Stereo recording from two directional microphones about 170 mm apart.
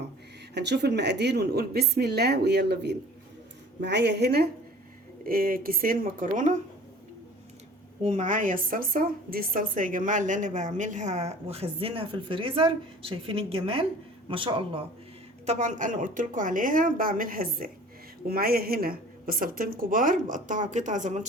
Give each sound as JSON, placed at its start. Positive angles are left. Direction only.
{"t": 0.5, "sound": "a woman's voice", "side_deg": -85}
{"t": 3.8, "sound": "a woman's voice", "side_deg": -85}
{"t": 5.2, "sound": "a woman's voice", "side_deg": -55}
{"t": 8.0, "sound": "a woman's voice", "side_deg": -45}
{"t": 15.4, "sound": "a woman's voice", "side_deg": -45}